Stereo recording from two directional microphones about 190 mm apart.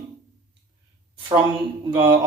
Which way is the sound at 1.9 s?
20° right (ahead or behind).